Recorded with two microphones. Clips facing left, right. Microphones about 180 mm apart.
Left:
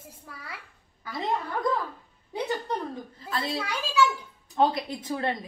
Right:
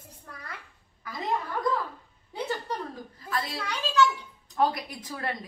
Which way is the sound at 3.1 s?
25° left (ahead or behind).